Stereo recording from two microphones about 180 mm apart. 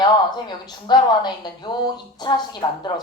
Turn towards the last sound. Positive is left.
turn(degrees=25)  # may be behind; listen again after turning